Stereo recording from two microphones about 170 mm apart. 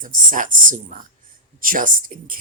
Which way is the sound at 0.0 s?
50° right (ahead or behind).